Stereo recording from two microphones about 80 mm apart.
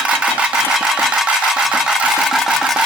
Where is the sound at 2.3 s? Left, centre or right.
Centre.